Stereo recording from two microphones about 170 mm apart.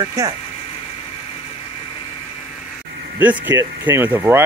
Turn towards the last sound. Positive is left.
turn(degrees=-15)  # may be behind; listen again after turning